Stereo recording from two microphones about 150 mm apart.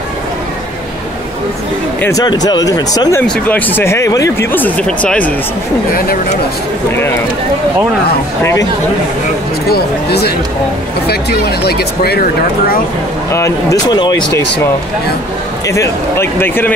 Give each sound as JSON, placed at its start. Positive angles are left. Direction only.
{"t": 2.0, "sound": "speech", "side_deg": 20}
{"t": 3.2, "sound": "speech", "side_deg": 10}
{"t": 9.7, "sound": "speech", "side_deg": 90}
{"t": 13.3, "sound": "speech", "side_deg": 20}
{"t": 15.7, "sound": "speech", "side_deg": 20}